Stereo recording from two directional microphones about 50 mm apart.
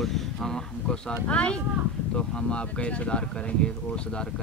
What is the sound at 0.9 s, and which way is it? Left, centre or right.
Speech, left.